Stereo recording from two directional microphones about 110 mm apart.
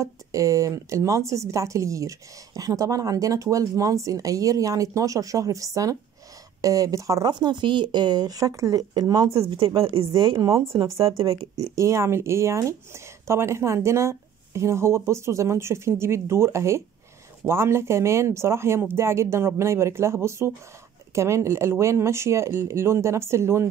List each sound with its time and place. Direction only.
0.0 s speech: 30° right (ahead or behind)
7.2 s speech: 40° right (ahead or behind)
9.8 s speech: 55° right (ahead or behind)
10.1 s speech: 35° right (ahead or behind)